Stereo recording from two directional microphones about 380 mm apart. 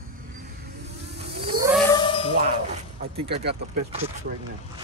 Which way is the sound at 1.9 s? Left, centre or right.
Centre.